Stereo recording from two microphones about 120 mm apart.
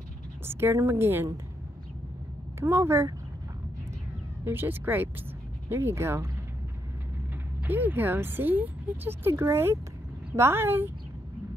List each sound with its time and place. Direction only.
0.5 s a woman's voice: 20° right (ahead or behind)
2.6 s a woman's voice: 20° right (ahead or behind)
4.5 s a woman's voice: 15° right (ahead or behind)
7.6 s a woman's voice: 15° right (ahead or behind)